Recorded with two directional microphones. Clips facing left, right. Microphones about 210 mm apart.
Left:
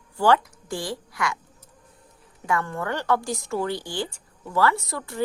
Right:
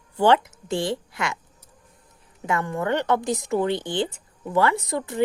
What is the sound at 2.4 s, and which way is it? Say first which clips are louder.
Speech: right 2 dB; 20° right (ahead or behind).